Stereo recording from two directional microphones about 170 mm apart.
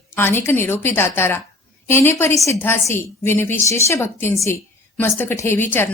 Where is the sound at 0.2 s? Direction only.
15° left (ahead or behind).